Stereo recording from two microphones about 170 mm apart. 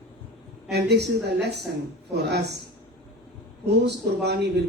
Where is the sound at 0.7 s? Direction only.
80° right.